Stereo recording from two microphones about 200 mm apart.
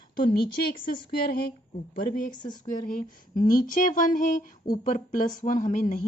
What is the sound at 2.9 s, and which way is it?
Speech, 45° left (ahead or behind).